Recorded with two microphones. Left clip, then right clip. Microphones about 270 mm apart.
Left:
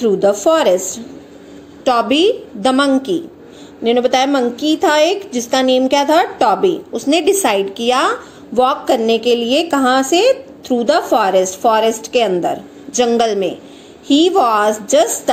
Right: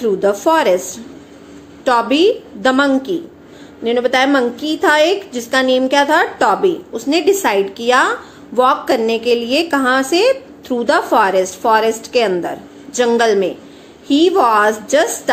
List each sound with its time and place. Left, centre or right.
0.0 s a woman's voice: centre